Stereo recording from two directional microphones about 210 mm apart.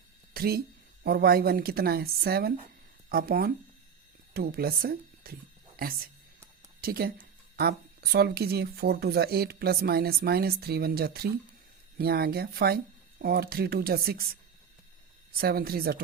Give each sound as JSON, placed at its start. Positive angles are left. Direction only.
{"t": 0.3, "sound": "speech", "side_deg": -45}
{"t": 15.4, "sound": "speech", "side_deg": -45}